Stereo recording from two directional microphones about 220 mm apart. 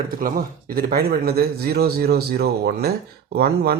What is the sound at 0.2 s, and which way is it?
A man's voice, 40° right (ahead or behind).